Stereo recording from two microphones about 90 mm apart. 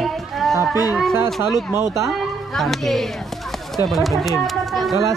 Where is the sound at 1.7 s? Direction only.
35° right (ahead or behind).